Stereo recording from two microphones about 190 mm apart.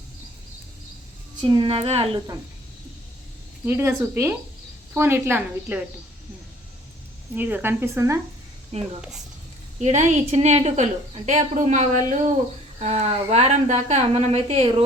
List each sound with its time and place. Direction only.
1.4 s a woman's voice: 25° right (ahead or behind)
3.7 s speech: 15° right (ahead or behind)
7.3 s speech: 10° right (ahead or behind)
8.7 s a woman's voice: 35° right (ahead or behind)